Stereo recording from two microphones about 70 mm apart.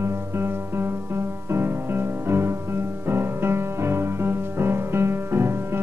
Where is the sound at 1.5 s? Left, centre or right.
Right.